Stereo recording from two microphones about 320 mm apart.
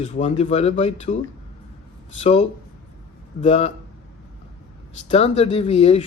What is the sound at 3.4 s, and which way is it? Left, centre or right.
Speech, centre.